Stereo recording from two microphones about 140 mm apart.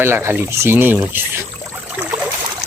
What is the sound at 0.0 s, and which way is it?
Speech, 15° right (ahead or behind).